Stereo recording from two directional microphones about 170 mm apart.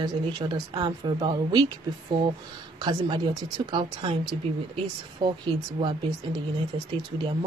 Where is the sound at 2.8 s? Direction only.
25° right (ahead or behind).